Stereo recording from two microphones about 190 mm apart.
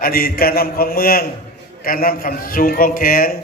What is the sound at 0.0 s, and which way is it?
A man's voice, 50° left (ahead or behind).